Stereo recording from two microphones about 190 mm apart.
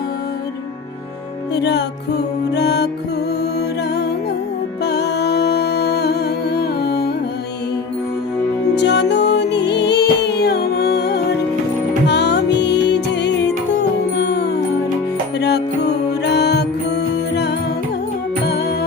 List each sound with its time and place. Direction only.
1.6 s music: 60° left (ahead or behind)
4.9 s music: 60° left (ahead or behind)
8.7 s music: 65° left (ahead or behind)